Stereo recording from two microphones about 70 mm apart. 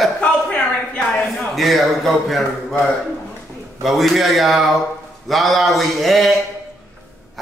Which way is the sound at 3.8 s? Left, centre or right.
Centre.